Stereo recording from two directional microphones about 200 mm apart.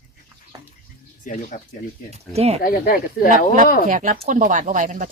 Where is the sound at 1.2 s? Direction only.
40° left (ahead or behind).